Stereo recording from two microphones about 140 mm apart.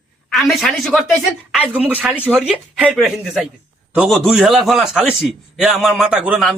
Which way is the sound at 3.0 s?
5° right (ahead or behind).